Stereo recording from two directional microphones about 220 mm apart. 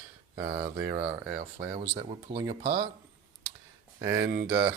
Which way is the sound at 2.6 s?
45° right (ahead or behind).